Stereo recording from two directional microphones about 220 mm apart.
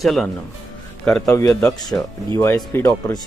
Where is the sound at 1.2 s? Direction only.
15° left (ahead or behind).